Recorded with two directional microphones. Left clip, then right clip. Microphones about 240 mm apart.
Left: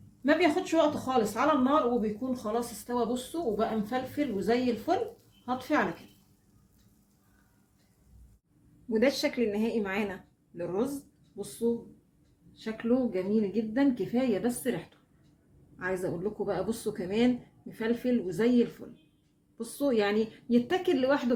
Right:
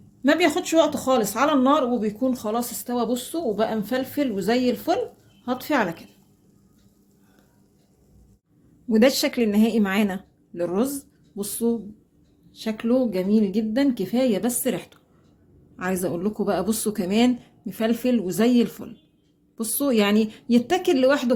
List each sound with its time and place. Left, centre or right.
0.2 s speech: right
8.9 s speech: right
12.5 s a woman's voice: right
15.8 s speech: right